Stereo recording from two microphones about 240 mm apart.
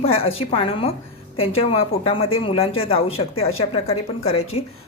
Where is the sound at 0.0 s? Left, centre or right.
Left.